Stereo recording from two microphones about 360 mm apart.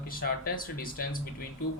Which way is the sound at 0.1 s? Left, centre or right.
Left.